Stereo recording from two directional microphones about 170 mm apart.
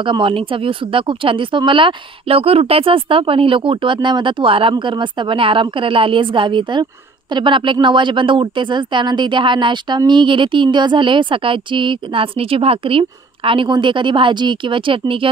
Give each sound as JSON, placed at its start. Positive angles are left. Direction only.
{"t": 0.0, "sound": "speech", "side_deg": -30}